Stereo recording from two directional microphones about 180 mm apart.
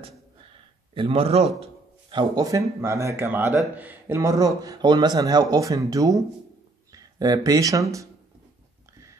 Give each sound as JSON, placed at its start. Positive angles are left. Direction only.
{"t": 0.9, "sound": "a man's voice", "side_deg": -30}